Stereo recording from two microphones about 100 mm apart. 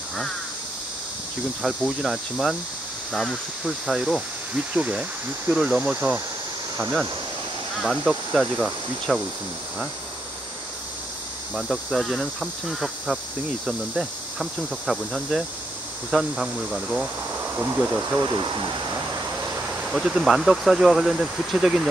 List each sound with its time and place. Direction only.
1.6 s speech: 5° right (ahead or behind)
8.0 s speech: 5° right (ahead or behind)
11.5 s speech: centre (ahead or behind)
17.3 s speech: 20° right (ahead or behind)
18.2 s speech: 45° right (ahead or behind)
18.9 s vehicle: 30° right (ahead or behind)
19.8 s speech: 5° right (ahead or behind)